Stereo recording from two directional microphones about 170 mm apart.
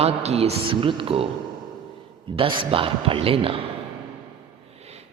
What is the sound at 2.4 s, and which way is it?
A man's voice, 30° right (ahead or behind).